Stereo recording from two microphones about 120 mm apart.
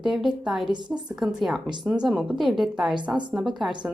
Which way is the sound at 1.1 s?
5° right (ahead or behind).